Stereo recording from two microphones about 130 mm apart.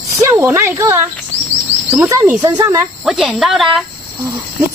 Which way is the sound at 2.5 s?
30° right (ahead or behind).